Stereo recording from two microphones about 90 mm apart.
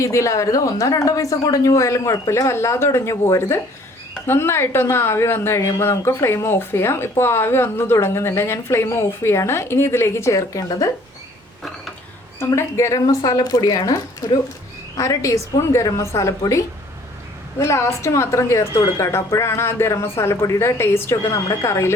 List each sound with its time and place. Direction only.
0.0 s speech: 35° left (ahead or behind)
12.5 s speech: 35° left (ahead or behind)